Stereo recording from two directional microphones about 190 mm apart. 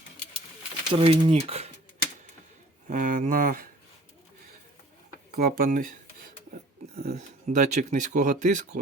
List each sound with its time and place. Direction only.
0.9 s speech: 30° right (ahead or behind)
2.8 s speech: 45° right (ahead or behind)
5.3 s speech: 55° right (ahead or behind)
7.5 s speech: 40° right (ahead or behind)